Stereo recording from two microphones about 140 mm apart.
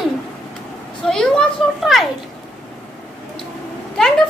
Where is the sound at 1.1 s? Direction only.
5° left (ahead or behind).